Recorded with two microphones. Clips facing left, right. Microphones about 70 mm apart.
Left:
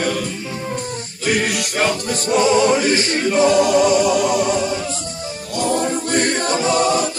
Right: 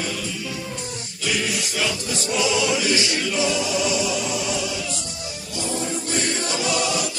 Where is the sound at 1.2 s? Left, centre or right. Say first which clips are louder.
Left 6 dB; left.